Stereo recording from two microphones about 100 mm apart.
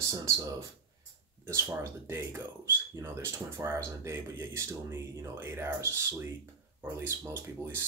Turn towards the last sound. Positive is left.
turn(degrees=-20)  # may be behind; listen again after turning